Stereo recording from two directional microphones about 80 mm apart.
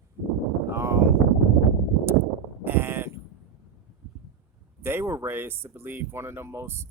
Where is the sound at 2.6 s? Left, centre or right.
Right.